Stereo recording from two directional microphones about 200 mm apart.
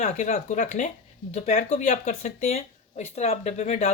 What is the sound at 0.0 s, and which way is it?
Speech, 35° left (ahead or behind).